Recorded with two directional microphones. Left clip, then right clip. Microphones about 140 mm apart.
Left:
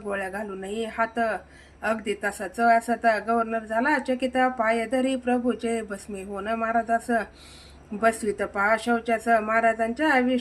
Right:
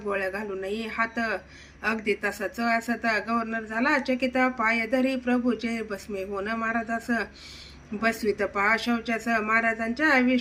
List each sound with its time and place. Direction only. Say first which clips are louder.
0.1 s speech: right 1 dB; 50° left (ahead or behind)